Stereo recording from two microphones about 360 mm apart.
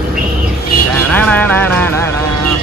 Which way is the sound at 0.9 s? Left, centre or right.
Centre.